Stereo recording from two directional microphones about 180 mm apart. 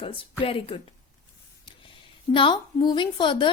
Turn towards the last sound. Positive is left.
turn(degrees=25)  # may be behind; listen again after turning